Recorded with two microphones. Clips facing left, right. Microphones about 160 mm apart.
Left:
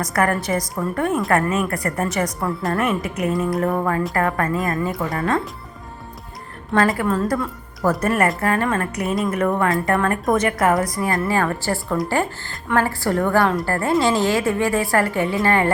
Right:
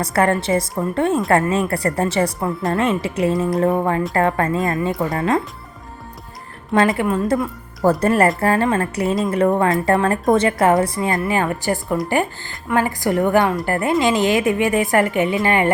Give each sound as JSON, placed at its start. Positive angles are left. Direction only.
{"t": 0.0, "sound": "a woman's voice", "side_deg": -30}
{"t": 6.7, "sound": "a woman's voice", "side_deg": -20}
{"t": 7.9, "sound": "a woman's voice", "side_deg": -30}